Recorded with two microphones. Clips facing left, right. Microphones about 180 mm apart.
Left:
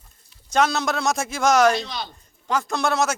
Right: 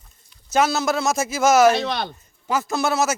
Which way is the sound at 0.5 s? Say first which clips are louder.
Right 2 dB; 5° right (ahead or behind).